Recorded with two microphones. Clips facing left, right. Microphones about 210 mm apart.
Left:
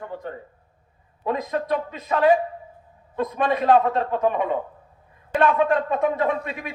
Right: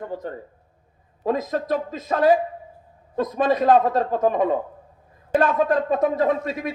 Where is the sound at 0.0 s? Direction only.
40° right (ahead or behind).